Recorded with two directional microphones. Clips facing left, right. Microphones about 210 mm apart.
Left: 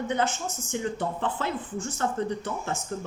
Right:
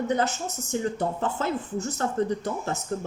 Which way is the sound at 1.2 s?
40° right (ahead or behind).